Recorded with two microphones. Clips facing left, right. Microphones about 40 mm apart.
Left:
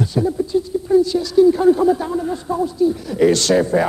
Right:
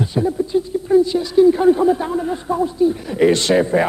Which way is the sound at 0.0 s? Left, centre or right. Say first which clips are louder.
Even; right.